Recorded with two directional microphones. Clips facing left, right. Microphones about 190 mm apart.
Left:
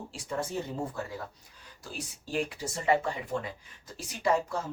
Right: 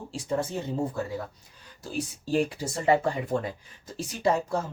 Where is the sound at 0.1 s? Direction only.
25° right (ahead or behind).